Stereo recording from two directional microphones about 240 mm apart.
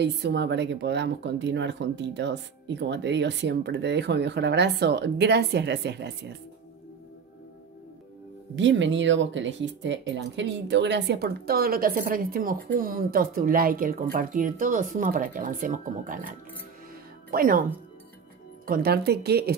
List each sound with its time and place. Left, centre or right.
0.0 s a woman's voice: right
8.5 s a woman's voice: right
18.7 s speech: right